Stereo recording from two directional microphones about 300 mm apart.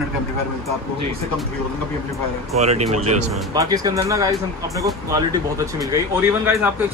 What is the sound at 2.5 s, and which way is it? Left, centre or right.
Speech, right.